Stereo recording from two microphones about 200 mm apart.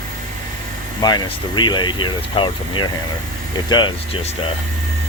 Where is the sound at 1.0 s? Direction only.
20° left (ahead or behind).